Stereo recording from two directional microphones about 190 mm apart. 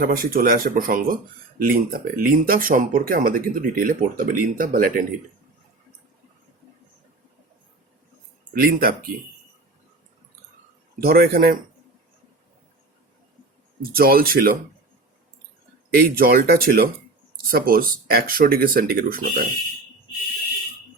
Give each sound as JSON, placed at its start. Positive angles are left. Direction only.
{"t": 0.0, "sound": "speech", "side_deg": -50}
{"t": 8.5, "sound": "speech", "side_deg": -50}
{"t": 10.9, "sound": "speech", "side_deg": -50}
{"t": 13.9, "sound": "speech", "side_deg": -50}
{"t": 15.9, "sound": "speech", "side_deg": -50}